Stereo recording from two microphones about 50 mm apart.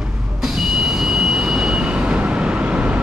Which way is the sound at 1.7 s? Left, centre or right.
Right.